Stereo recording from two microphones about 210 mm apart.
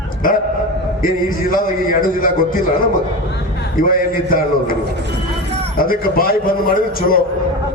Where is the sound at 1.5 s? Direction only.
40° left (ahead or behind).